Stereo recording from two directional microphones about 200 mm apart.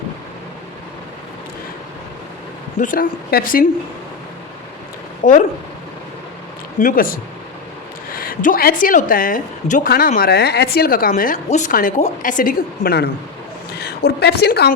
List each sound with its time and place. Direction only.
2.8 s a woman's voice: 45° left (ahead or behind)
5.2 s speech: 40° left (ahead or behind)
6.7 s a woman's voice: 45° left (ahead or behind)